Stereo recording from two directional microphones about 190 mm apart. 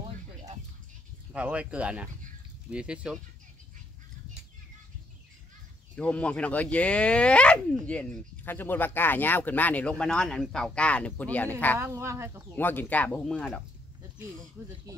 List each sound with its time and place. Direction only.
1.3 s speech: 5° right (ahead or behind)
5.9 s speech: 5° left (ahead or behind)
11.8 s speech: 15° right (ahead or behind)
12.5 s speech: 10° left (ahead or behind)
14.6 s speech: 10° right (ahead or behind)